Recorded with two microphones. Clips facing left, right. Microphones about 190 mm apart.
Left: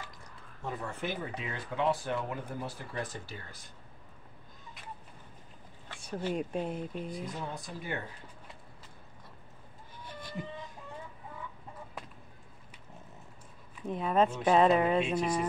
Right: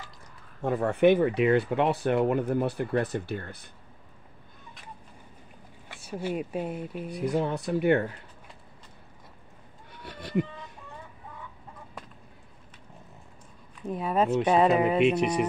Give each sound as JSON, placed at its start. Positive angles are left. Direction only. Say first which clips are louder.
{"t": 0.6, "sound": "speech", "louder": "right 13 dB", "side_deg": -60}
{"t": 5.9, "sound": "speech", "louder": "right 2 dB", "side_deg": -10}
{"t": 7.1, "sound": "speech", "louder": "right 11 dB", "side_deg": -70}
{"t": 9.9, "sound": "bird", "louder": "right 12 dB", "side_deg": -70}
{"t": 13.7, "sound": "speech", "louder": "right 1 dB", "side_deg": -5}
{"t": 15.0, "sound": "speech", "louder": "right 7 dB", "side_deg": -70}